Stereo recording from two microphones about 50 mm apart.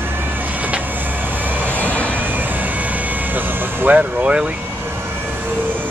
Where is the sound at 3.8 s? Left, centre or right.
Right.